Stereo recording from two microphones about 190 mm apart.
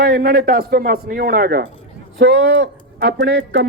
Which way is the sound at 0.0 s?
50° right (ahead or behind).